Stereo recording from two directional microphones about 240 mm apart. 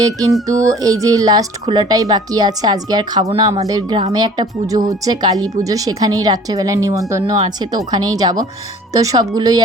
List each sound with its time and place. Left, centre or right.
0.0 s speech: centre